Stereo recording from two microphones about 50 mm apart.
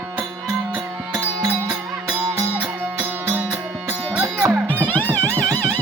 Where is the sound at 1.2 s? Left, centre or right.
Right.